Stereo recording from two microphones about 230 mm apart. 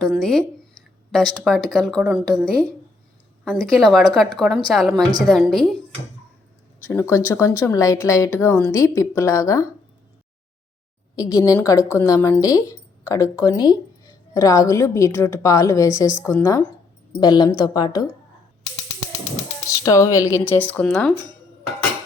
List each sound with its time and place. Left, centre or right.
0.0 s speech: centre
3.4 s speech: centre
7.3 s speech: centre
11.2 s speech: centre
19.6 s speech: centre